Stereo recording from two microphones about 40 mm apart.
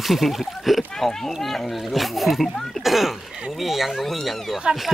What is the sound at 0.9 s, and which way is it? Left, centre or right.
A child's voice, centre.